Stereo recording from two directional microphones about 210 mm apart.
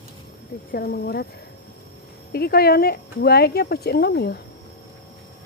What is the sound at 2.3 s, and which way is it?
Speech, 45° left (ahead or behind).